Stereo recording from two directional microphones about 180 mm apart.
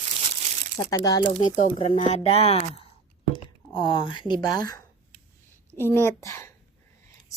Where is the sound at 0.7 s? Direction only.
20° left (ahead or behind).